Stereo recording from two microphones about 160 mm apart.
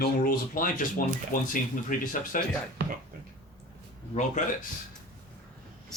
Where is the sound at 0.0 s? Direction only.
65° left (ahead or behind).